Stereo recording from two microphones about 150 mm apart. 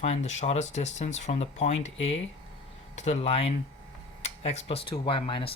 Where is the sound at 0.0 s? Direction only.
50° left (ahead or behind).